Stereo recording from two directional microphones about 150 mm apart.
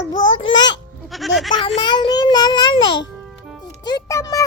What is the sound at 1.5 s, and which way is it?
Music, 30° left (ahead or behind).